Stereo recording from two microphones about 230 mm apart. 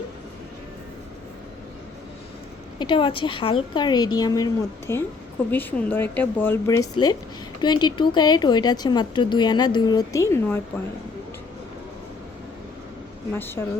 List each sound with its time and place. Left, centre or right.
2.7 s a woman's voice: left
13.3 s speech: centre